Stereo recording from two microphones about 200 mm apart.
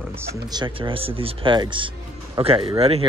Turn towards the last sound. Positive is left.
turn(degrees=-30)  # may be behind; listen again after turning